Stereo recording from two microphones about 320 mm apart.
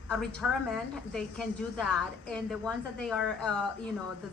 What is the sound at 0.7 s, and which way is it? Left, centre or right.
A woman's voice, centre.